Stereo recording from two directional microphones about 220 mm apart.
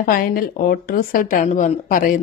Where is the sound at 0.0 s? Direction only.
40° left (ahead or behind).